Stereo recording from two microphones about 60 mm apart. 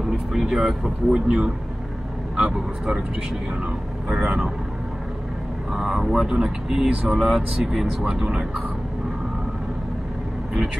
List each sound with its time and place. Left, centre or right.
0.3 s speech: centre
1.2 s a man's voice: centre
4.1 s speech: centre
5.7 s speech: centre